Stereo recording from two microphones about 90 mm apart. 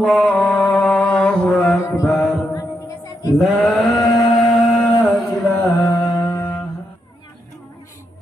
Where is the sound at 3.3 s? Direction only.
Centre (ahead or behind).